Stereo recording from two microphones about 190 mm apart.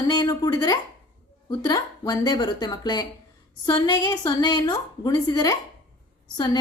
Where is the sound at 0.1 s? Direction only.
20° left (ahead or behind).